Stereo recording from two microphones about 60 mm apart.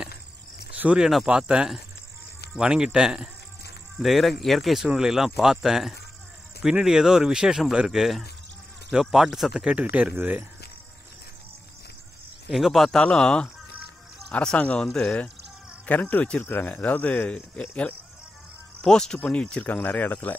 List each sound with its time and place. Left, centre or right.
0.9 s speech: centre
9.8 s speech: right
12.4 s speech: centre
13.0 s speech: centre
15.8 s speech: left
18.8 s speech: centre
19.6 s speech: left